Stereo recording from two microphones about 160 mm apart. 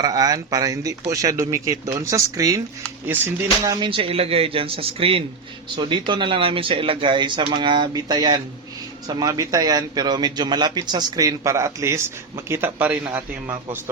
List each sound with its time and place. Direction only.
0.0 s a man's voice: 25° right (ahead or behind)
3.7 s a man's voice: 30° right (ahead or behind); by 13.0 s 10° right (ahead or behind)